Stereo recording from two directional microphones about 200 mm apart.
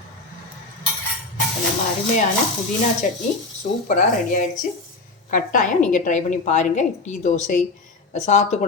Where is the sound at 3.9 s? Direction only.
40° left (ahead or behind).